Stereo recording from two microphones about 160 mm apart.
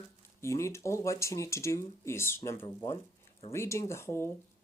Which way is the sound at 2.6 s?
25° left (ahead or behind).